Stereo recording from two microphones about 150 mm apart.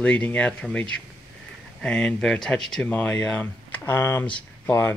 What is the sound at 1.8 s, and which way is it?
Speech, 5° left (ahead or behind).